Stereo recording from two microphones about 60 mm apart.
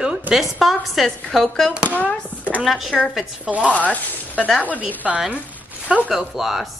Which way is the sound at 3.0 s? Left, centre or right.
Centre.